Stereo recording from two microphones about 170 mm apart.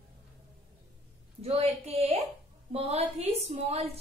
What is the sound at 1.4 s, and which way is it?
A woman's voice, 35° right (ahead or behind).